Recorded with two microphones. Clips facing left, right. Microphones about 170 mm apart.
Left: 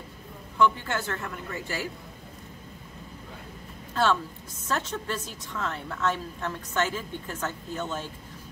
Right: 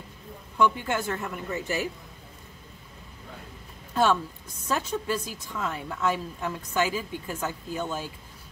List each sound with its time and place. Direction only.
0.6 s a woman's voice: 15° right (ahead or behind)
3.9 s a woman's voice: 15° right (ahead or behind)